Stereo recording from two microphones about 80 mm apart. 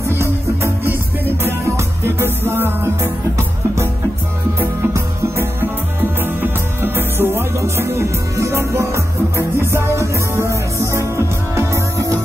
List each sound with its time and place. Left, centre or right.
0.0 s music: right
4.6 s music: right